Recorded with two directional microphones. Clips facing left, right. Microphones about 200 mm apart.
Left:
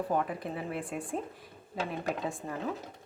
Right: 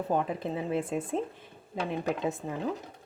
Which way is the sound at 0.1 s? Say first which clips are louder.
Right 5 dB; 20° right (ahead or behind).